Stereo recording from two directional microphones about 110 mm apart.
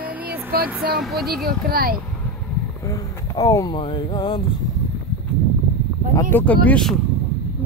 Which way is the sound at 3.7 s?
50° left (ahead or behind).